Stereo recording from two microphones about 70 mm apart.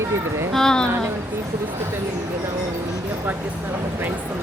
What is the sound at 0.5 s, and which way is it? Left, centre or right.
Speech, centre.